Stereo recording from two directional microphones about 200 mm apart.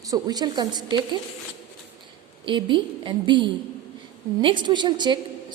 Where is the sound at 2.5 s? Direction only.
25° right (ahead or behind).